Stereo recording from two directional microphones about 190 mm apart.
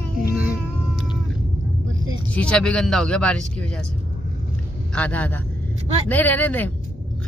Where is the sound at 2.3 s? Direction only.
5° left (ahead or behind).